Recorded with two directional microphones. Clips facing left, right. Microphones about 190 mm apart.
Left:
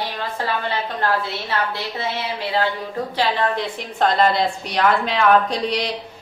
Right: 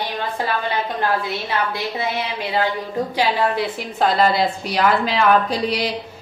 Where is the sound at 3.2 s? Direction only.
10° right (ahead or behind).